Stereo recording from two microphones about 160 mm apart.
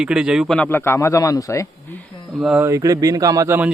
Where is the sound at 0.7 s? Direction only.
15° left (ahead or behind).